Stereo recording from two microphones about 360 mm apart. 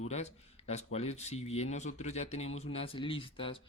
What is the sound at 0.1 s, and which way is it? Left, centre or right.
Speech, centre.